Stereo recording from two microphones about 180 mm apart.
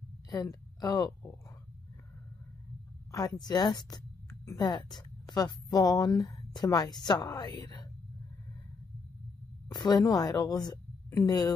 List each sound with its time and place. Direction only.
0.3 s a woman's voice: 20° left (ahead or behind)
3.1 s a woman's voice: 20° left (ahead or behind)
9.7 s a woman's voice: 20° left (ahead or behind)